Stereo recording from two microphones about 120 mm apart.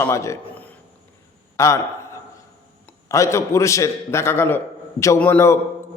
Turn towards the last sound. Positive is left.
turn(degrees=20)  # may be behind; listen again after turning